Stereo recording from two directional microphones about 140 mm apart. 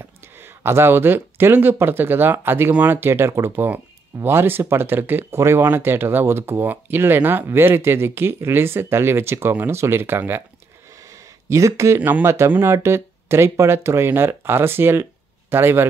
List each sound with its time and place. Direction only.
0.0 s speech: 15° right (ahead or behind)